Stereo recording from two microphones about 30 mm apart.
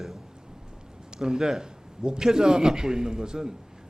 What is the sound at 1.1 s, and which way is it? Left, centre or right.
A man's voice, right.